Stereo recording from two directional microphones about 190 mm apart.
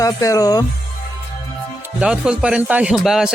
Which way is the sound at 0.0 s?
15° left (ahead or behind).